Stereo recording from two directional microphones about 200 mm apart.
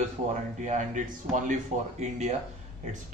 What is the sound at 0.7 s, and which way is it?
Speech, 40° right (ahead or behind).